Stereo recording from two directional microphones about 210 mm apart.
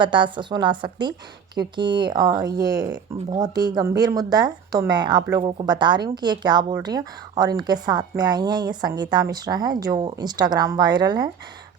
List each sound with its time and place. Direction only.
0.0 s speech: 20° right (ahead or behind)